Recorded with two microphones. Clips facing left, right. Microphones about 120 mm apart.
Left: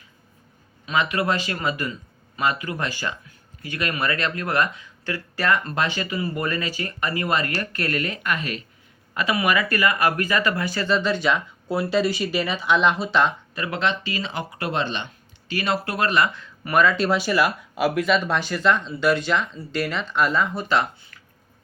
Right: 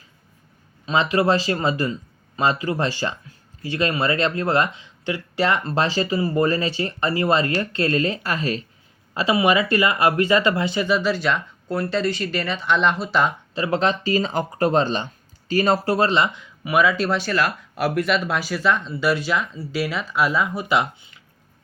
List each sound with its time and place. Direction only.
0.9 s speech: 30° right (ahead or behind)
10.8 s speech: 5° right (ahead or behind)
13.5 s speech: 30° right (ahead or behind); by 21.2 s 15° right (ahead or behind)